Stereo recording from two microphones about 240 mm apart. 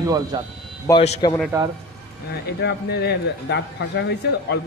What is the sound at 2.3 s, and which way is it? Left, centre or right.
A man's voice, left.